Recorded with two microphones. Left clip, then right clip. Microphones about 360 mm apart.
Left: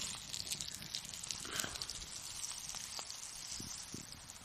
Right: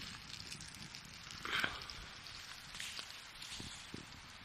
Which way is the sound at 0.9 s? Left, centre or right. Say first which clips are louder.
Left 6 dB; left.